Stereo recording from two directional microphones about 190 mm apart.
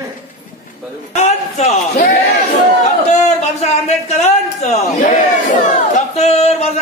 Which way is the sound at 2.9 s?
40° left (ahead or behind).